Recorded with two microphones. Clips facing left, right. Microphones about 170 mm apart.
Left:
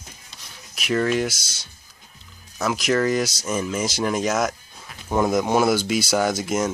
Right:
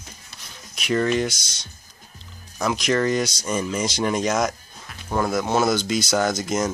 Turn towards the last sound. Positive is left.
turn(degrees=5)  # may be behind; listen again after turning